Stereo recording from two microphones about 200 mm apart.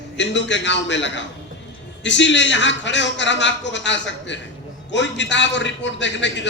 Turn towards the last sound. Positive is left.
turn(degrees=65)  # may be behind; listen again after turning